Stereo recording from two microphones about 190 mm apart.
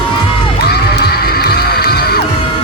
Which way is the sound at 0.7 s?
55° left (ahead or behind).